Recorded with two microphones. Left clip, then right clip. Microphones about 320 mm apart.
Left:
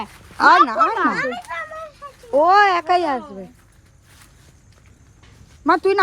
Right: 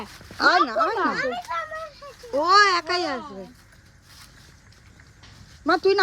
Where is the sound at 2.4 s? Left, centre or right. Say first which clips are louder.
Left 2 dB; centre.